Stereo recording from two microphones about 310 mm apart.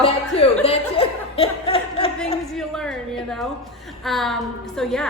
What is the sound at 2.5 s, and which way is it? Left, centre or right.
A woman's voice, centre.